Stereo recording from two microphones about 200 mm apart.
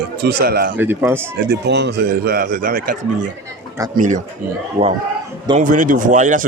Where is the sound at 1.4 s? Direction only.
55° right (ahead or behind).